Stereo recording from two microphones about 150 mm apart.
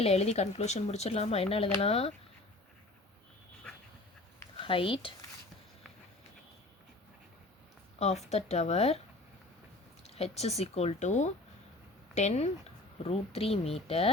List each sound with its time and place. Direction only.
0.0 s speech: 45° left (ahead or behind)
4.5 s speech: 35° left (ahead or behind)
7.9 s speech: 45° left (ahead or behind)
10.0 s speech: 45° left (ahead or behind)